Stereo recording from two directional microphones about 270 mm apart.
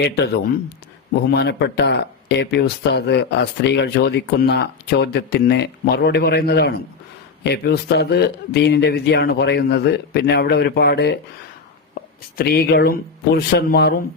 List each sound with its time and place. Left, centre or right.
1.3 s speech: left
12.4 s speech: left